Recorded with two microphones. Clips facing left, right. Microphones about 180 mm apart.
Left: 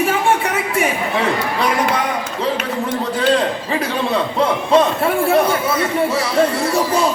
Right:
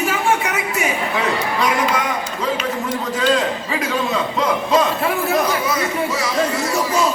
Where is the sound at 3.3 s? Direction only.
30° left (ahead or behind).